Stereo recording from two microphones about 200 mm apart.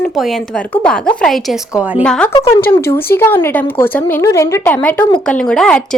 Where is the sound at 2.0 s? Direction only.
5° left (ahead or behind).